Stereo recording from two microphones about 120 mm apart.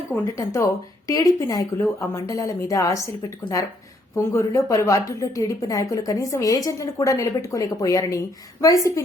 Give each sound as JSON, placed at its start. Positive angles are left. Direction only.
{"t": 0.3, "sound": "a woman's voice", "side_deg": 25}